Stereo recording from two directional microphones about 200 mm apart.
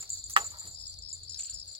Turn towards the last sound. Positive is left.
turn(degrees=-25)  # may be behind; listen again after turning